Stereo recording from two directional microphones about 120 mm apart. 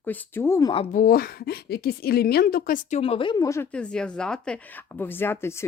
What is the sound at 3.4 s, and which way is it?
Speech, 25° left (ahead or behind).